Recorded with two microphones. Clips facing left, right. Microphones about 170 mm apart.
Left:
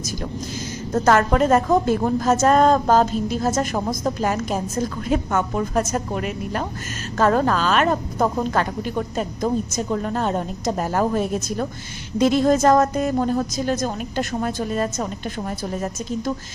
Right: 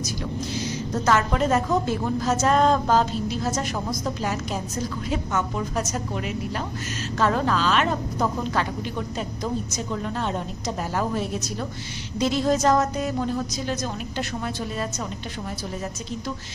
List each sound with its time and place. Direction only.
0.9 s a woman's voice: 50° left (ahead or behind)